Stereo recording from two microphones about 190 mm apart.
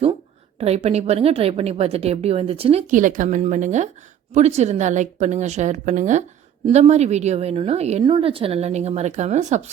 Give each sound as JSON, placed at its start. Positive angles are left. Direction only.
{"t": 0.6, "sound": "a woman's voice", "side_deg": -35}
{"t": 2.9, "sound": "a woman's voice", "side_deg": -45}